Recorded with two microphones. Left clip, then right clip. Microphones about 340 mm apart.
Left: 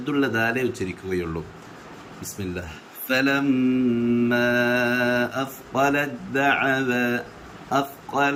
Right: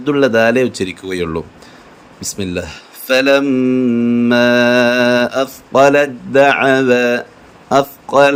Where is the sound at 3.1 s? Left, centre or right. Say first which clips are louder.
Right 10 dB; centre.